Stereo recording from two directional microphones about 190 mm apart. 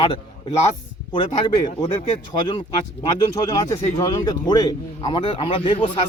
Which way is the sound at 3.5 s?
20° left (ahead or behind).